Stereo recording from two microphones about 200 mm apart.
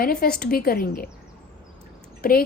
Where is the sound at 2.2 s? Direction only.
45° left (ahead or behind).